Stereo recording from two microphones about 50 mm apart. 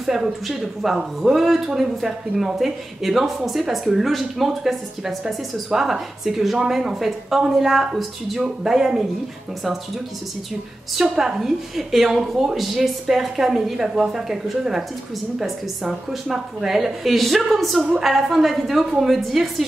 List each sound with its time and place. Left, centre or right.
0.0 s speech: centre
8.4 s a woman's voice: centre
11.0 s a woman's voice: centre